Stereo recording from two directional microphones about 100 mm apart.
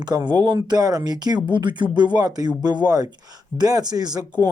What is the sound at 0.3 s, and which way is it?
Speech, 45° right (ahead or behind).